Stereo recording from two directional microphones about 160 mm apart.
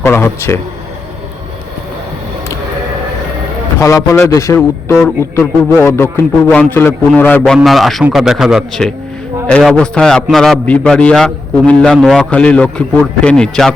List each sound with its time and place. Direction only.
0.0 s a man's voice: 15° left (ahead or behind)
3.8 s a man's voice: 20° left (ahead or behind); by 13.7 s 5° left (ahead or behind)